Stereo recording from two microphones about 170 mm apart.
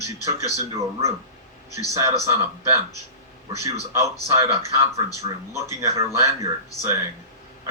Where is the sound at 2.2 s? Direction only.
20° right (ahead or behind).